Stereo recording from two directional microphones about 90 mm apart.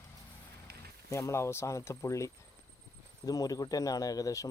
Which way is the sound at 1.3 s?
30° left (ahead or behind).